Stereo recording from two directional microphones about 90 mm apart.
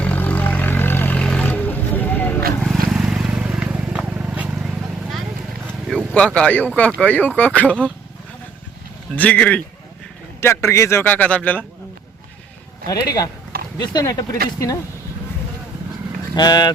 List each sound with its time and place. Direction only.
0.0 s vehicle: 15° left (ahead or behind)
1.2 s roaring cats: 10° left (ahead or behind)
2.6 s vehicle: 5° right (ahead or behind)
6.1 s speech: 15° left (ahead or behind)
9.1 s speech: 15° left (ahead or behind)
10.4 s a man's voice: 30° left (ahead or behind)
11.0 s speech: 15° left (ahead or behind)
12.9 s speech: 40° left (ahead or behind)
16.3 s speech: 50° left (ahead or behind)